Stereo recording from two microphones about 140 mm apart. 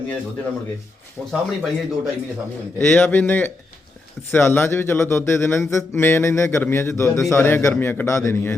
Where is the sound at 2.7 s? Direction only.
15° left (ahead or behind).